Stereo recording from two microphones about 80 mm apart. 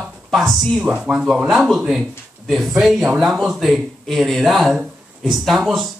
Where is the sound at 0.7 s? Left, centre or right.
Centre.